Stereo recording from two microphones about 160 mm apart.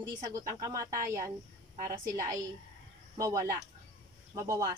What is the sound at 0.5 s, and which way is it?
Speech, 20° right (ahead or behind).